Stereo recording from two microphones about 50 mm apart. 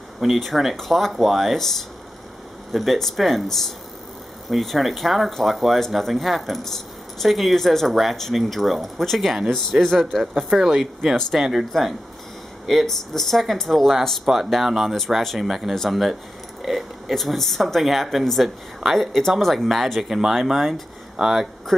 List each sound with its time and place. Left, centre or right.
0.2 s speech: centre